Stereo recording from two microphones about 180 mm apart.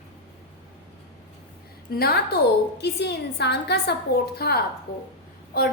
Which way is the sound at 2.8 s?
70° left (ahead or behind).